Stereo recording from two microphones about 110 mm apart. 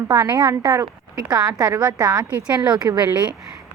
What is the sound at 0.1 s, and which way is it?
A woman's voice, 25° right (ahead or behind).